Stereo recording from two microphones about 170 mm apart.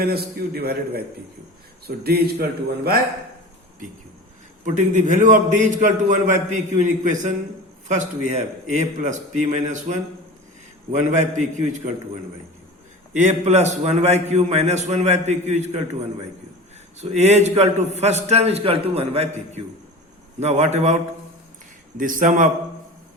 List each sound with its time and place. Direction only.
0.0 s a man's voice: 65° right (ahead or behind)
4.6 s a man's voice: 45° right (ahead or behind)
13.1 s a man's voice: 45° right (ahead or behind)
17.0 s a man's voice: 40° right (ahead or behind)
21.9 s a man's voice: 50° right (ahead or behind)